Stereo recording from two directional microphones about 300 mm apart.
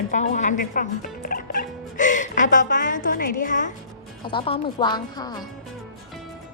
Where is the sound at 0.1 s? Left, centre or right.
Left.